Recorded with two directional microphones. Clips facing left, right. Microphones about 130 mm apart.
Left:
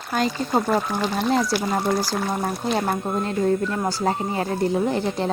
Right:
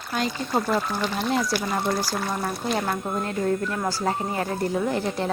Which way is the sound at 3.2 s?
20° left (ahead or behind).